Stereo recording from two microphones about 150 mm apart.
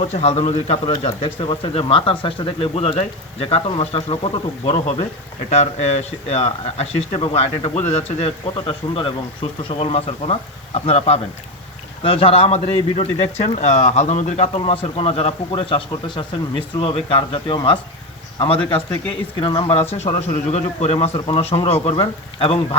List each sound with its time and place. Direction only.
0.0 s speech: 45° left (ahead or behind)